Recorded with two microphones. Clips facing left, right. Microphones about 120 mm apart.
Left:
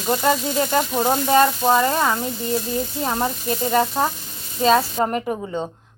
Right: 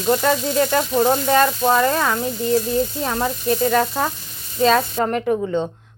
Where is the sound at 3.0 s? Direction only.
20° left (ahead or behind).